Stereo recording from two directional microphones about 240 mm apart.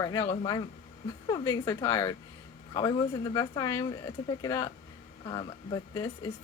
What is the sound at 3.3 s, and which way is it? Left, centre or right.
A woman's voice, centre.